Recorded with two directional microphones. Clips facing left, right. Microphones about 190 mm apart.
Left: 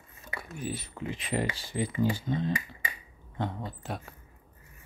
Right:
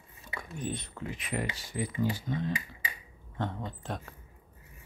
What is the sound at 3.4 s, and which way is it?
Speech, 5° left (ahead or behind).